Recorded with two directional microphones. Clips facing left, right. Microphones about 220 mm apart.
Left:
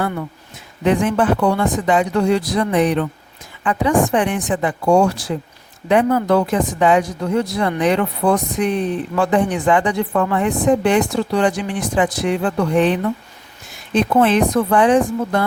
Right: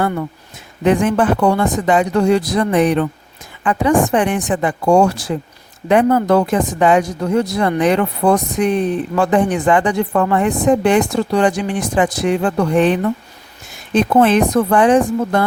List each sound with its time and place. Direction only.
0.9 s speech: 50° right (ahead or behind)